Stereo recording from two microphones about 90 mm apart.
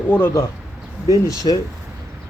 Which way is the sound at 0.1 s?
25° left (ahead or behind).